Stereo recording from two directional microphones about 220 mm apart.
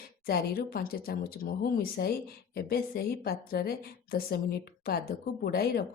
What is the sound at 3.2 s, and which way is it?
Speech, 45° left (ahead or behind).